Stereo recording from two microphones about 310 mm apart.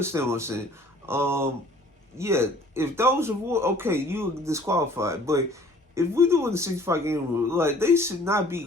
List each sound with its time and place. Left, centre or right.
0.0 s speech: centre